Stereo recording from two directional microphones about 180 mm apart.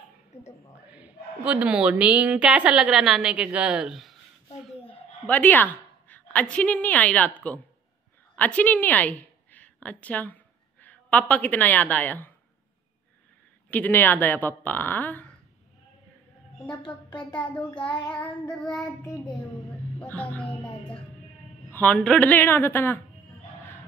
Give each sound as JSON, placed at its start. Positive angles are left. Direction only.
{"t": 0.8, "sound": "a woman's voice", "side_deg": -5}
{"t": 4.9, "sound": "a woman's voice", "side_deg": 10}
{"t": 8.4, "sound": "a woman's voice", "side_deg": 10}
{"t": 13.7, "sound": "a woman's voice", "side_deg": 10}
{"t": 16.6, "sound": "a woman's voice", "side_deg": 25}
{"t": 17.6, "sound": "a woman's voice", "side_deg": 5}
{"t": 21.7, "sound": "a woman's voice", "side_deg": 5}